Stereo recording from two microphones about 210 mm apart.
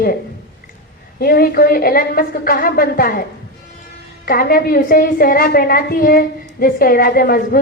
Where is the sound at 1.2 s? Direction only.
45° left (ahead or behind).